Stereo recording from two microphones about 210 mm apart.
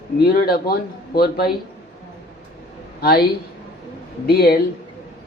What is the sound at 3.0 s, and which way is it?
Speech, 45° left (ahead or behind).